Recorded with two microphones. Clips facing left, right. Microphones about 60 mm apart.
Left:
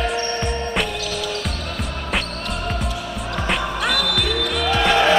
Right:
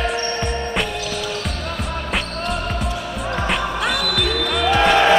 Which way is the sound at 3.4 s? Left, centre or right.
Centre.